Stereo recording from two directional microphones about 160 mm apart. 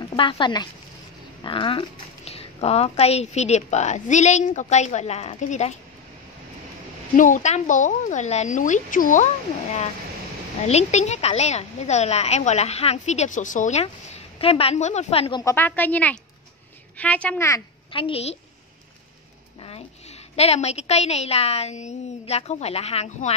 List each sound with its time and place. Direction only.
0.1 s a woman's voice: 30° left (ahead or behind); by 5.8 s 45° left (ahead or behind)
7.2 s a woman's voice: 55° left (ahead or behind)
10.7 s a woman's voice: 45° left (ahead or behind)
15.4 s a woman's voice: 10° left (ahead or behind)
17.9 s a woman's voice: 35° left (ahead or behind)
20.3 s a woman's voice: 40° left (ahead or behind)